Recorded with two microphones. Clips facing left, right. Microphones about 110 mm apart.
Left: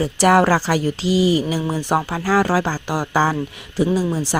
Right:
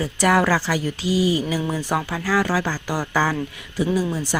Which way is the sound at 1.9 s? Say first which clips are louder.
Left 5 dB; 30° left (ahead or behind).